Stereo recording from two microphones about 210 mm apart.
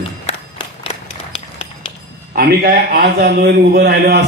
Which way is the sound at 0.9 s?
25° left (ahead or behind).